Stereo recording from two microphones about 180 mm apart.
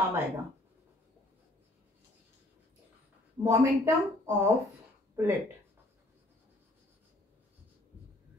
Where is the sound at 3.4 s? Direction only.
15° right (ahead or behind).